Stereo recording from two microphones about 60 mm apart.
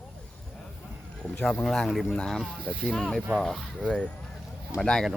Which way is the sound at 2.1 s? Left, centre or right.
Centre.